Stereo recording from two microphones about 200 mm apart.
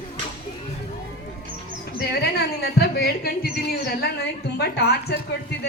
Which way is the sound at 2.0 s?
55° left (ahead or behind).